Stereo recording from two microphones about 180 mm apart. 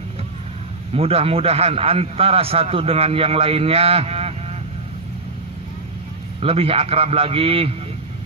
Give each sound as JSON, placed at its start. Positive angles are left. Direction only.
{"t": 0.9, "sound": "a man's voice", "side_deg": -35}
{"t": 6.4, "sound": "a man's voice", "side_deg": -30}